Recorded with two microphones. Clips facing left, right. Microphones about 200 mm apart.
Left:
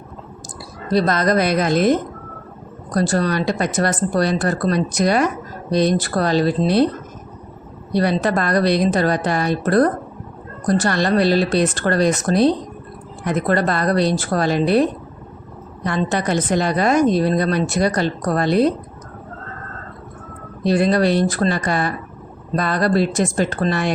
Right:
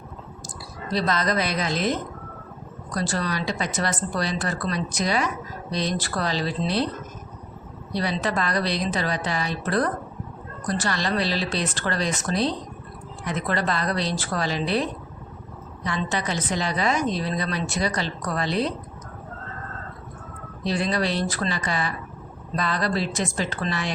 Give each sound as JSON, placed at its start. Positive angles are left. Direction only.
{"t": 0.9, "sound": "a woman's voice", "side_deg": 50}
{"t": 7.9, "sound": "a woman's voice", "side_deg": 55}
{"t": 20.7, "sound": "a woman's voice", "side_deg": 55}